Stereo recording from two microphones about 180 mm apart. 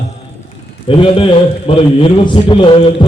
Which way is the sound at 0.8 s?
30° left (ahead or behind).